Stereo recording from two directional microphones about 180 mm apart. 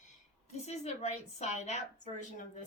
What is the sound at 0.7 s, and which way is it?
Speech, 40° left (ahead or behind).